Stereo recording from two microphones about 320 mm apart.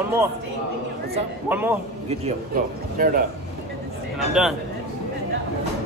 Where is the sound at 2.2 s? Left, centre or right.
Right.